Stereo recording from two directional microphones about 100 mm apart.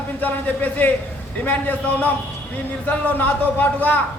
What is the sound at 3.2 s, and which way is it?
Speech, 20° left (ahead or behind).